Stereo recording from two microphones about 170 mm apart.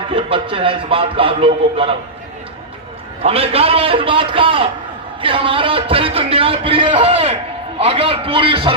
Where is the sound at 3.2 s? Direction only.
35° right (ahead or behind).